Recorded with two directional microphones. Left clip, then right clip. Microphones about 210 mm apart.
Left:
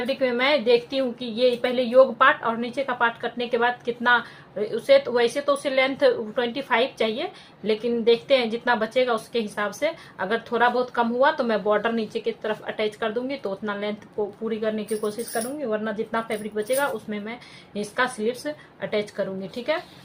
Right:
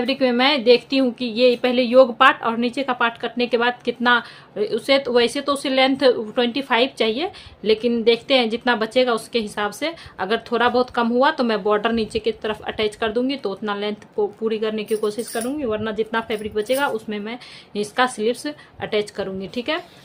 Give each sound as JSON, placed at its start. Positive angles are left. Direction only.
{"t": 0.0, "sound": "a woman's voice", "side_deg": -55}